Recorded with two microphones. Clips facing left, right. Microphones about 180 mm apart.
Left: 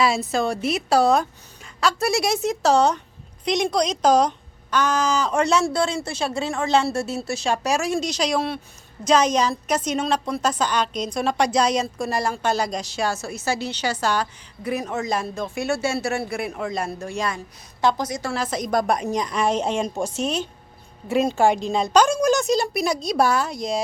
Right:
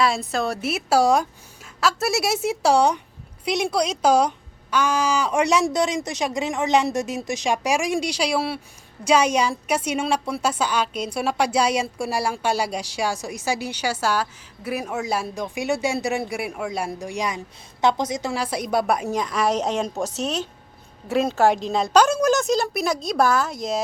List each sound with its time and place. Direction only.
0.0 s a woman's voice: centre (ahead or behind)